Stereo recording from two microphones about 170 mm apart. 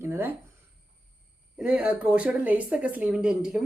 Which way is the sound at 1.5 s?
5° right (ahead or behind).